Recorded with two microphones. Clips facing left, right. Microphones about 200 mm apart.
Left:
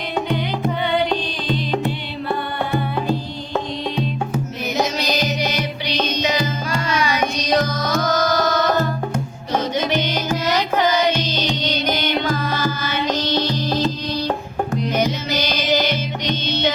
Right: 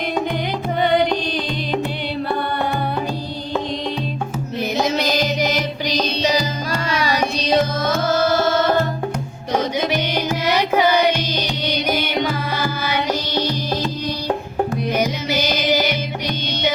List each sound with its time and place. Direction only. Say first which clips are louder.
5.9 s music: right 2 dB; 35° right (ahead or behind)
9.5 s music: right 1 dB; 10° right (ahead or behind)
14.8 s music: even; 10° right (ahead or behind)